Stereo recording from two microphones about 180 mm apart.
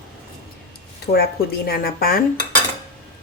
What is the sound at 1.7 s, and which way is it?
Speech, 55° left (ahead or behind).